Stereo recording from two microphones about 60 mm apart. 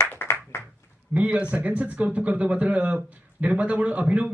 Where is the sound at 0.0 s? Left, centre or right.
Left.